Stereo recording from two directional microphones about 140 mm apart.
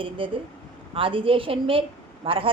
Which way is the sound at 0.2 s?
40° right (ahead or behind).